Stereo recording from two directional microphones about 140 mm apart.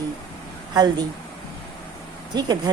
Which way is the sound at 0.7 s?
30° right (ahead or behind).